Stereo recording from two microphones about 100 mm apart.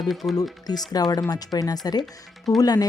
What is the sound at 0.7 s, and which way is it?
Speech, 40° left (ahead or behind).